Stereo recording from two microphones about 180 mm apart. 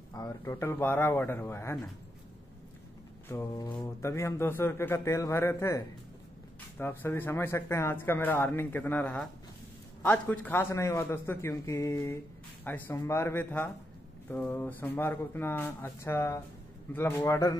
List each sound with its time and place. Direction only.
0.1 s speech: 15° left (ahead or behind)
3.3 s speech: 15° left (ahead or behind)
6.8 s speech: 15° left (ahead or behind)